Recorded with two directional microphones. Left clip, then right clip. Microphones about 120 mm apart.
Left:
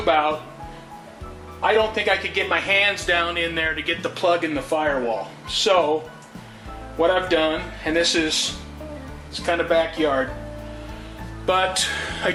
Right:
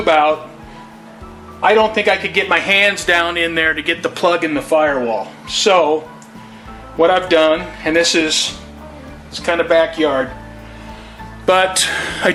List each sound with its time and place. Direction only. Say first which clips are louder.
0.0 s a man's voice: right 7 dB; 30° right (ahead or behind)
1.6 s a man's voice: right 7 dB; 25° right (ahead or behind)
7.0 s a man's voice: right 7 dB; 30° right (ahead or behind)
9.5 s a man's voice: right 7 dB; 25° right (ahead or behind)
11.4 s a man's voice: right 7 dB; 30° right (ahead or behind)